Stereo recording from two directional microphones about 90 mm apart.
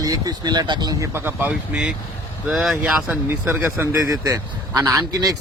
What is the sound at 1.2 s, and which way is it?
Speech, 20° right (ahead or behind).